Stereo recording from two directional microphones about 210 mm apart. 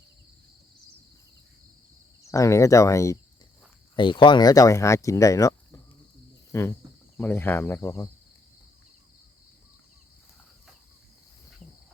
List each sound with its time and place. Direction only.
2.3 s speech: 15° left (ahead or behind)